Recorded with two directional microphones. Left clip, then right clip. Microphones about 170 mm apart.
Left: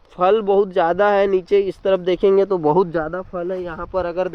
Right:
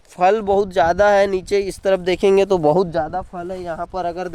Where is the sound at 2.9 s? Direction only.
40° right (ahead or behind).